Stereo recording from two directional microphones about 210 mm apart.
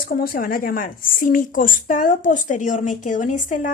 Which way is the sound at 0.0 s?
45° left (ahead or behind).